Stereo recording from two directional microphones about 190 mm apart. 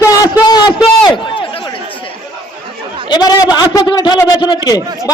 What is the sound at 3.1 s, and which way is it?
A man's voice, 20° left (ahead or behind).